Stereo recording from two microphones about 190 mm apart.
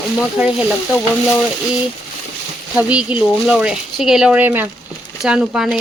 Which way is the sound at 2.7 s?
5° right (ahead or behind).